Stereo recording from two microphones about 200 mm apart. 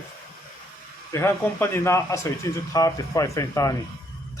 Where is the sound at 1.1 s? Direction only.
15° left (ahead or behind).